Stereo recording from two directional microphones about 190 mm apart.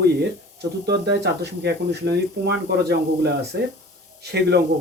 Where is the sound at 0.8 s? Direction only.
60° right (ahead or behind).